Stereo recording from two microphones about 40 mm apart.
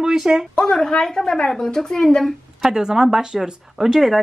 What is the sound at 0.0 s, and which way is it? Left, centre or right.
Speech, centre.